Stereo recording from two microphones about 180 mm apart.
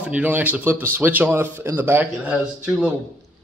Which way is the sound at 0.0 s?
10° right (ahead or behind).